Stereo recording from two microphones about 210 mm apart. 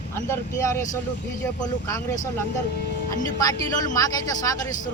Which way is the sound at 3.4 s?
15° left (ahead or behind).